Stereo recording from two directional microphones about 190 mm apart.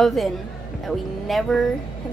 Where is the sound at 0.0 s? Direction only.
Centre (ahead or behind).